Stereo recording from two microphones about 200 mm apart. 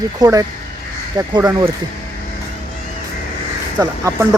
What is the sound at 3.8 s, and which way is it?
Speech, 15° right (ahead or behind).